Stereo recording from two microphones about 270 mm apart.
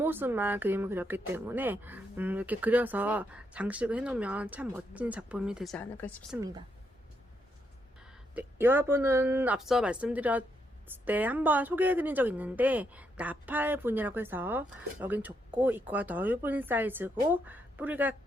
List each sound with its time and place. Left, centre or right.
0.0 s speech: centre
6.3 s a woman's voice: centre
8.0 s a woman's voice: centre